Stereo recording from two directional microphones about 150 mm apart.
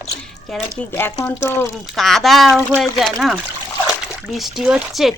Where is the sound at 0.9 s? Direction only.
15° left (ahead or behind).